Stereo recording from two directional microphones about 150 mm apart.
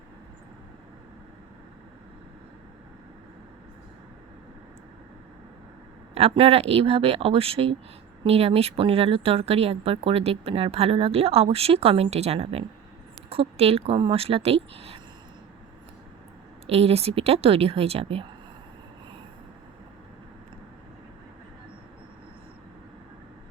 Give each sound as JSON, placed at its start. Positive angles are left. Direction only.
{"t": 6.1, "sound": "speech", "side_deg": -40}
{"t": 16.6, "sound": "speech", "side_deg": -40}